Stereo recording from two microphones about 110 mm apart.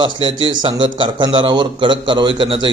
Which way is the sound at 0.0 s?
50° right (ahead or behind).